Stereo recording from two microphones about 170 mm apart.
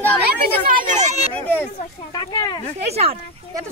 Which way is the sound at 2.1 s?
25° left (ahead or behind).